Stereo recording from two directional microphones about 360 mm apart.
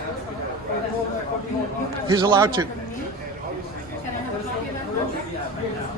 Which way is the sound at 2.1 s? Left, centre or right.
Centre.